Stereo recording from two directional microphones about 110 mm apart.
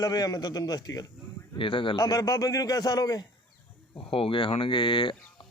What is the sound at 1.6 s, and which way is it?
Speech, 50° left (ahead or behind).